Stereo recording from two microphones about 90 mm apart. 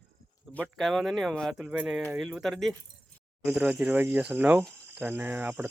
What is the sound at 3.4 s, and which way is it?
Speech, 10° right (ahead or behind).